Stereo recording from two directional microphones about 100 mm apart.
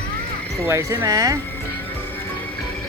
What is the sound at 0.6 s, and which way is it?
Speech, 25° right (ahead or behind).